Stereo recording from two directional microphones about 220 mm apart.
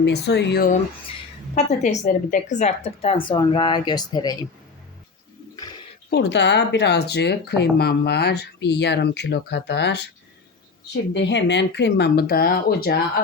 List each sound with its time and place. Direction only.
0.0 s speech: 50° left (ahead or behind)
1.5 s a woman's voice: 30° left (ahead or behind)
6.1 s speech: 50° left (ahead or behind)
11.1 s speech: 55° left (ahead or behind)